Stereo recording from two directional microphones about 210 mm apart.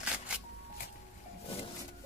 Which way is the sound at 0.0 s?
5° right (ahead or behind).